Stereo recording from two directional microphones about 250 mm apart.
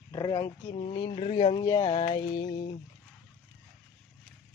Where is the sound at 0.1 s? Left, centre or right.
Centre.